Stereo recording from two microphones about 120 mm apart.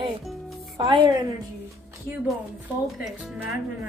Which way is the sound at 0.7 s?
40° right (ahead or behind).